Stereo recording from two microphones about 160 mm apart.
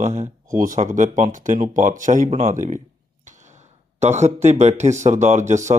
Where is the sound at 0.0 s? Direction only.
50° right (ahead or behind).